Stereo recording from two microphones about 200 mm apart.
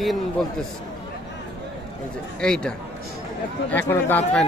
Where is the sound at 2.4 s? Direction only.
5° left (ahead or behind).